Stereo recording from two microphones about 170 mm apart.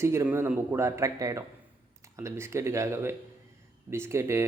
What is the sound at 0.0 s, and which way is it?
Speech, 15° right (ahead or behind).